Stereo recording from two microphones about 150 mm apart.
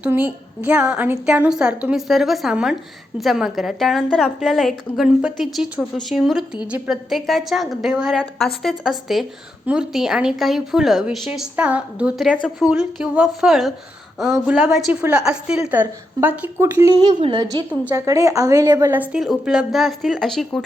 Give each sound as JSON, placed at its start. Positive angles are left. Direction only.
{"t": 0.0, "sound": "a woman's voice", "side_deg": -10}
{"t": 17.1, "sound": "a woman's voice", "side_deg": -30}